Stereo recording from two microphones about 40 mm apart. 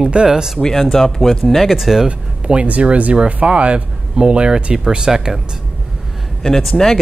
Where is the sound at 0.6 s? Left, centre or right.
Centre.